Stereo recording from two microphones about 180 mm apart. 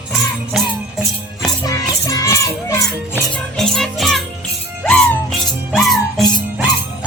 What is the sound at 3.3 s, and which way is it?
Music, 5° left (ahead or behind).